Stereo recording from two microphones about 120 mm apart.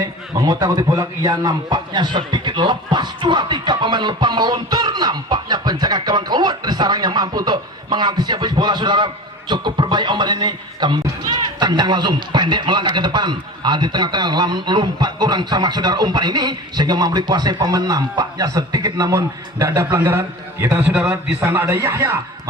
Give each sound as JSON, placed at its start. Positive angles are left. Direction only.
{"t": 0.0, "sound": "speech", "side_deg": -35}